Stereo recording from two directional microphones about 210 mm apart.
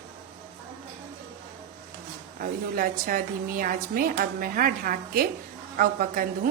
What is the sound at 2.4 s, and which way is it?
A woman's voice, 45° right (ahead or behind).